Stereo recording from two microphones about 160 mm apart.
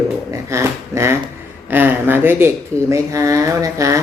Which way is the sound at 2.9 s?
20° right (ahead or behind).